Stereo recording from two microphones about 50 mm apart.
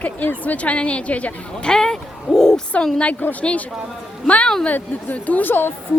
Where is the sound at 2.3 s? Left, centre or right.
Centre.